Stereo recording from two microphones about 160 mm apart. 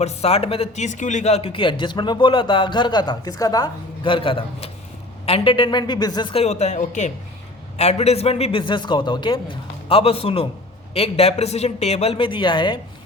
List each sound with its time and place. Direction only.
0.0 s speech: 40° left (ahead or behind)